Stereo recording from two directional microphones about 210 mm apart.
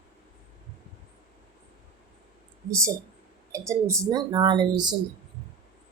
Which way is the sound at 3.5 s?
15° right (ahead or behind).